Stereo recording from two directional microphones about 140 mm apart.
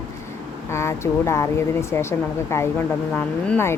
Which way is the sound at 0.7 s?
20° left (ahead or behind).